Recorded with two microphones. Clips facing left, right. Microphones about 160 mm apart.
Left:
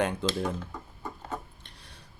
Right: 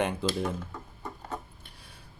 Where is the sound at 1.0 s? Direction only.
Centre (ahead or behind).